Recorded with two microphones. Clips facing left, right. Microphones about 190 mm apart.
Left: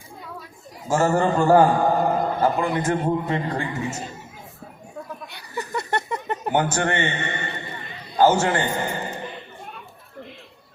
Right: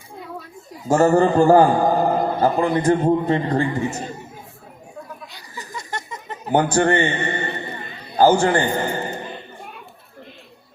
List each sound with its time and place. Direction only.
0.9 s a man's voice: 35° right (ahead or behind)
5.3 s laughter: 60° left (ahead or behind)
6.5 s a man's voice: 35° right (ahead or behind)